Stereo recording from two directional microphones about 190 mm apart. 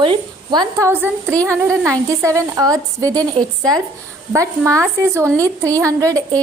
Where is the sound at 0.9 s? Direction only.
10° right (ahead or behind).